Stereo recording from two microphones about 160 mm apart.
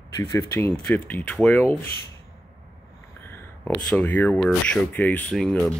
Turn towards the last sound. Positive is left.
turn(degrees=5)  # may be behind; listen again after turning